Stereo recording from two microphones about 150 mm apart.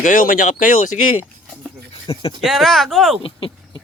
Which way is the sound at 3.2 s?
35° left (ahead or behind).